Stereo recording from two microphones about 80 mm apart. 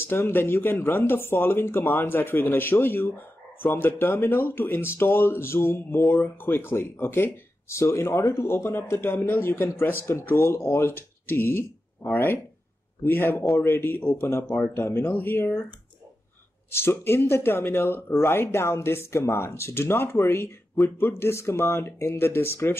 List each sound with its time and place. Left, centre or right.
0.0 s speech: left
5.9 s speech: centre
6.4 s speech: left
8.1 s speech: left
8.4 s speech: left
16.7 s speech: left